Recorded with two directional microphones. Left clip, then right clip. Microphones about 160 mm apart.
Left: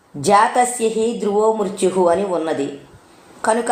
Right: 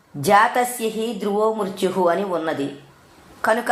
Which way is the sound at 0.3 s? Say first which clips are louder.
Left 2 dB; 35° right (ahead or behind).